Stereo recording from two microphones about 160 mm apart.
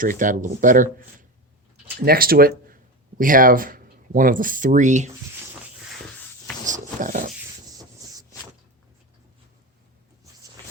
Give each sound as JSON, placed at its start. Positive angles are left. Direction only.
{"t": 0.0, "sound": "speech", "side_deg": -55}
{"t": 2.0, "sound": "speech", "side_deg": -65}
{"t": 6.7, "sound": "a sound", "side_deg": -55}